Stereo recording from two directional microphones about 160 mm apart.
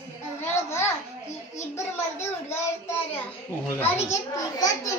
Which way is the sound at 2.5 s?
15° left (ahead or behind).